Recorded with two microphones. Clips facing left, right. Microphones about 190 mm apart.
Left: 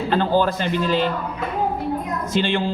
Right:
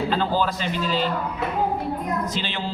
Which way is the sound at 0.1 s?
55° left (ahead or behind).